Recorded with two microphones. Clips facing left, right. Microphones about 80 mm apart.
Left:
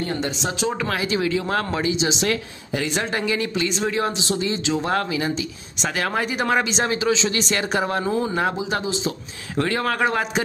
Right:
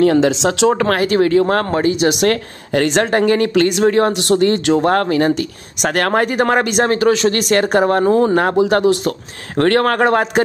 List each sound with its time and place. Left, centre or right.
0.0 s speech: right